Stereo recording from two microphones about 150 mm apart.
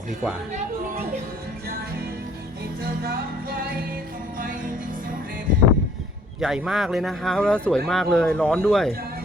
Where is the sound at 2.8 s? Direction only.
90° right.